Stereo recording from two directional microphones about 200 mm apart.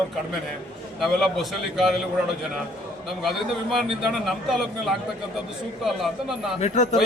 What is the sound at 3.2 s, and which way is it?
A man's voice, centre (ahead or behind).